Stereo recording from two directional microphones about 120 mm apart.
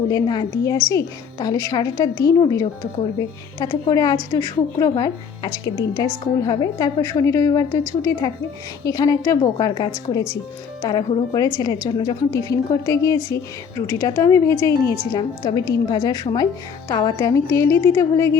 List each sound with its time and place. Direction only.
0.1 s a woman's voice: 35° left (ahead or behind)